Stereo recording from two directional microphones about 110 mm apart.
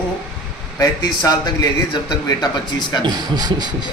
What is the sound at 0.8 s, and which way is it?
Speech, 40° left (ahead or behind).